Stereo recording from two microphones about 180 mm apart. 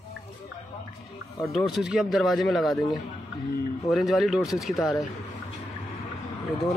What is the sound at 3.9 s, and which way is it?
Speech, centre (ahead or behind).